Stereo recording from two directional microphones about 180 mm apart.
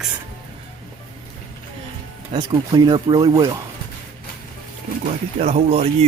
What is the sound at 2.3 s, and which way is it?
Speech, 25° right (ahead or behind).